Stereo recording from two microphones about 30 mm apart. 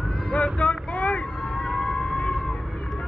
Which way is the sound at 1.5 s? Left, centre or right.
Centre.